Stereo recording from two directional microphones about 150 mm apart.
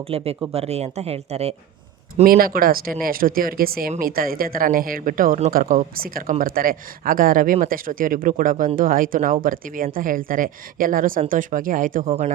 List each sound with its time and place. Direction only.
0.1 s speech: 40° right (ahead or behind)
2.2 s speech: 75° right (ahead or behind)